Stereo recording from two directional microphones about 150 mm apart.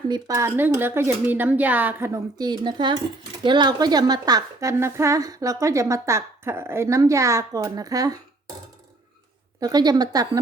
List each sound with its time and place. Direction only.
0.1 s a woman's voice: 20° right (ahead or behind)
9.6 s a woman's voice: 25° right (ahead or behind)